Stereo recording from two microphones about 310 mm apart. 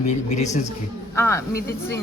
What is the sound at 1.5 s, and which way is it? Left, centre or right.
Speech, left.